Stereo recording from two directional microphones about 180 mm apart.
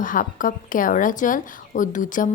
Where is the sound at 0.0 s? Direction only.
50° left (ahead or behind).